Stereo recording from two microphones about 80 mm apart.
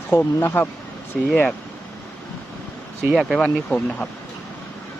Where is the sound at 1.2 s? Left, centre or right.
Centre.